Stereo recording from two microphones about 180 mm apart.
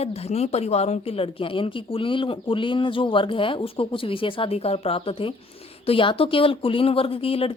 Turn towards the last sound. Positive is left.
turn(degrees=30)  # may be behind; listen again after turning